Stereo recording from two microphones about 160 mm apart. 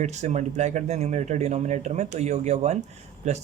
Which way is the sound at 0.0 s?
45° right (ahead or behind).